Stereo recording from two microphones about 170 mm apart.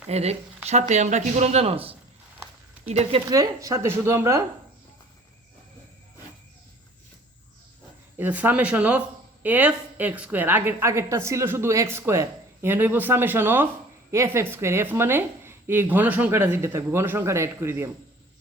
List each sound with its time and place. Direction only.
0.1 s speech: 40° right (ahead or behind)
3.2 s speech: 20° right (ahead or behind)
8.2 s speech: 10° right (ahead or behind)